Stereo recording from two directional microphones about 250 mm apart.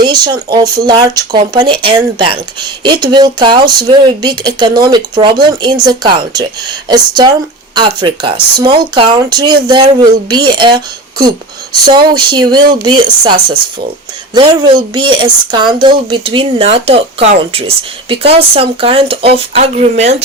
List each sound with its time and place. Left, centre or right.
0.0 s speech: centre